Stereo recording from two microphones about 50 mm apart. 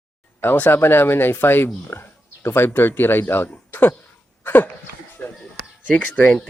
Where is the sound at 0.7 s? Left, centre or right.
Left.